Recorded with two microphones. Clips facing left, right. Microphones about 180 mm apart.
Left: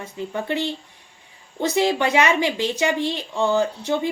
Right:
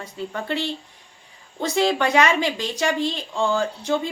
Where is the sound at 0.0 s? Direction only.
15° left (ahead or behind).